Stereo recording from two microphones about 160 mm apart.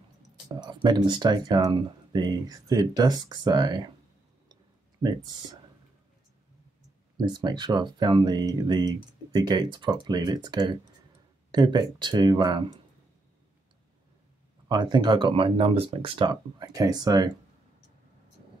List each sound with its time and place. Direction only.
0.6 s speech: 25° right (ahead or behind)
5.0 s speech: 25° right (ahead or behind)
7.2 s speech: 25° right (ahead or behind)
14.7 s speech: 25° right (ahead or behind)